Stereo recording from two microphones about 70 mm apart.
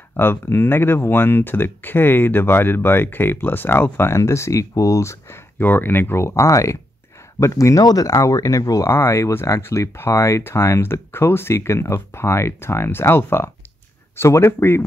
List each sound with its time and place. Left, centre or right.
0.2 s speech: left
4.2 s speech: left
5.6 s speech: left
7.8 s speech: left